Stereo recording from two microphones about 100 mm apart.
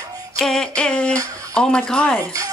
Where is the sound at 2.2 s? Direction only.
35° right (ahead or behind).